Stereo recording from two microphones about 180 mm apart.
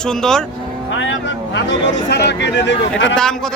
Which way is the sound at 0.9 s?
90° left.